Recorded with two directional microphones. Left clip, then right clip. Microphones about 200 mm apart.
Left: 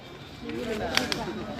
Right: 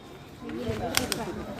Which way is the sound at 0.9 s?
55° right (ahead or behind).